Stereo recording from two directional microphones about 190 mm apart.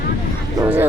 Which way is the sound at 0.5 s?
10° right (ahead or behind).